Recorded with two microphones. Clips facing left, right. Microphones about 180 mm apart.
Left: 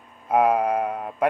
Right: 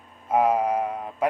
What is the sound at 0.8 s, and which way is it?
Mantra, 60° left (ahead or behind).